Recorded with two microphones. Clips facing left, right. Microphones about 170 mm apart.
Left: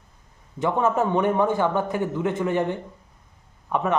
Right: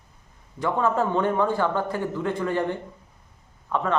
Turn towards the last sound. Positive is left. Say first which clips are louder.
# left 1 dB
turn(degrees=15)  # may be behind; listen again after turning